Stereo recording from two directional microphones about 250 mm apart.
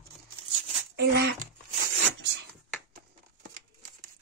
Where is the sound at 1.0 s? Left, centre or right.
Right.